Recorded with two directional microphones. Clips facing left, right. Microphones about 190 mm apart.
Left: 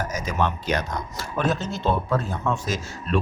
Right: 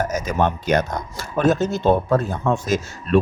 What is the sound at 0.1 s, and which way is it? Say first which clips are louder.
Speech: right 5 dB; 50° right (ahead or behind).